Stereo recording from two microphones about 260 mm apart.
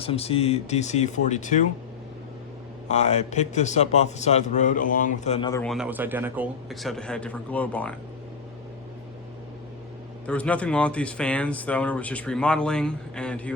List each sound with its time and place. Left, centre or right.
0.0 s a man's voice: left
2.9 s a man's voice: left
5.6 s speech: centre
10.2 s speech: centre